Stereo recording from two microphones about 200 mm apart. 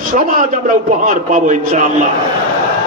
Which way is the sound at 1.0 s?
40° right (ahead or behind).